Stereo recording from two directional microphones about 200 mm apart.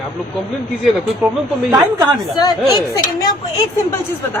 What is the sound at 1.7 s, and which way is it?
Speech, 20° right (ahead or behind).